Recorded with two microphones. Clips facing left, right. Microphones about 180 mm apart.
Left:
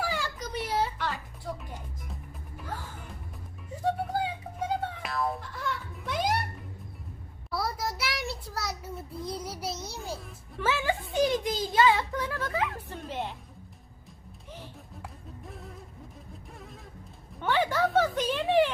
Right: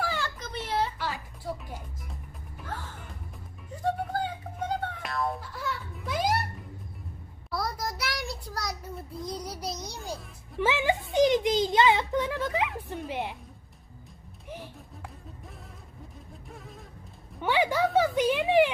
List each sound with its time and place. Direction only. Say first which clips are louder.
0.0 s a sound: even; 10° left (ahead or behind)
0.9 s music: even; 5° right (ahead or behind)
7.5 s child singing: even; 5° left (ahead or behind)
10.6 s a child's voice: right 3 dB; 15° right (ahead or behind)
11.1 s a sound: right 5 dB; 20° right (ahead or behind)
13.1 s speech: even; 15° right (ahead or behind)
15.0 s music: left 2 dB; centre (ahead or behind)
16.5 s speech: right 3 dB; centre (ahead or behind)
17.4 s a child's voice: right 1 dB; 10° right (ahead or behind)